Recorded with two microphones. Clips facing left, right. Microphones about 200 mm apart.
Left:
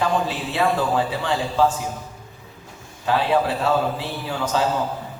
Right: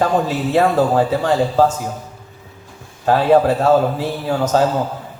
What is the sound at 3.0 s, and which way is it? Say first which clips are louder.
A woman's voice: right 7 dB; 45° right (ahead or behind).